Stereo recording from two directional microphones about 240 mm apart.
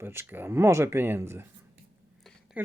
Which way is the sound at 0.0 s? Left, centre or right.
Centre.